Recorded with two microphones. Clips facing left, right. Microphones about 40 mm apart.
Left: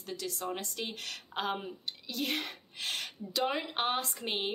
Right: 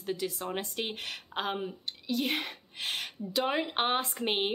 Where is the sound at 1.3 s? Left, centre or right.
Centre.